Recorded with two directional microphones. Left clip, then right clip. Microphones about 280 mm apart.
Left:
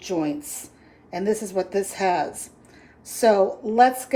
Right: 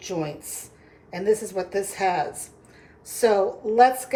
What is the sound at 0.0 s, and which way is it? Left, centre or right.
A woman's voice, left.